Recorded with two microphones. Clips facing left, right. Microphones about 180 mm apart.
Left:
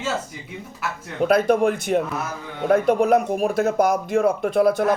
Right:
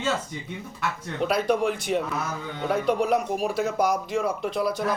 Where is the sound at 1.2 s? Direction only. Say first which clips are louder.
Left 6 dB; 50° left (ahead or behind).